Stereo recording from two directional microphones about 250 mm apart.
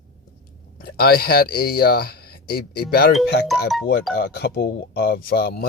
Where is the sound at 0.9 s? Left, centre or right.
Left.